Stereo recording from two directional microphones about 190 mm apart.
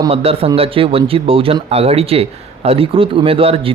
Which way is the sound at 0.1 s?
30° right (ahead or behind).